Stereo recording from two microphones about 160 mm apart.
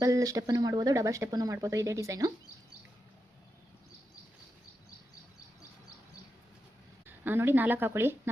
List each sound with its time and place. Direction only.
0.0 s speech: 20° right (ahead or behind)
7.1 s speech: 15° right (ahead or behind)